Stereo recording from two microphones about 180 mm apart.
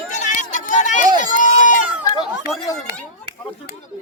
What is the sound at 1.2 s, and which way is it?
Run, 45° left (ahead or behind).